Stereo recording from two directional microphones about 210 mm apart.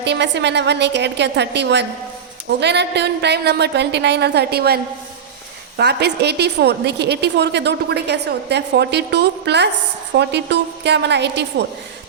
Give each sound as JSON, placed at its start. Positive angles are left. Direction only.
{"t": 0.0, "sound": "a woman's voice", "side_deg": -55}